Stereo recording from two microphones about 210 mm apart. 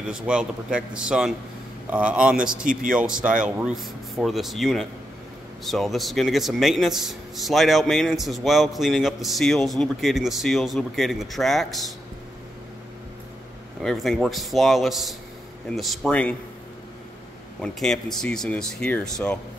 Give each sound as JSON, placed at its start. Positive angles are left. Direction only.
{"t": 0.0, "sound": "speech", "side_deg": -5}
{"t": 2.6, "sound": "speech", "side_deg": -40}
{"t": 2.9, "sound": "speech", "side_deg": -5}
{"t": 13.8, "sound": "speech", "side_deg": 0}
{"t": 17.6, "sound": "speech", "side_deg": 0}